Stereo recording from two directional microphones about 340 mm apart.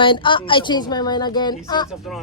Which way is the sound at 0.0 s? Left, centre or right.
Centre.